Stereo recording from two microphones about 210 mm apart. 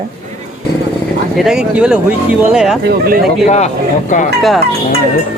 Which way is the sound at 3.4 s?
35° left (ahead or behind).